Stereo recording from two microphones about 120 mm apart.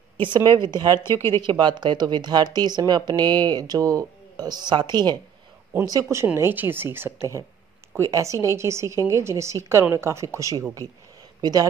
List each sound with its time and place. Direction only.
0.2 s speech: 40° right (ahead or behind)
0.9 s a woman's voice: 20° left (ahead or behind)
1.4 s speech: 40° right (ahead or behind)
5.9 s a woman's voice: 25° right (ahead or behind)